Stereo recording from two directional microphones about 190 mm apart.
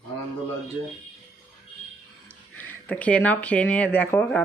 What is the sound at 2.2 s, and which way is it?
Speech, 10° left (ahead or behind).